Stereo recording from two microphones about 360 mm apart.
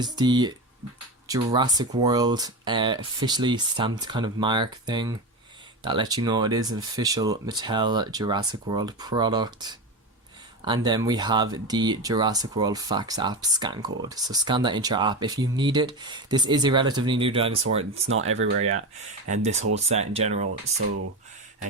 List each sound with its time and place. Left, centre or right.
0.0 s speech: centre
18.3 s speech: right
19.3 s speech: centre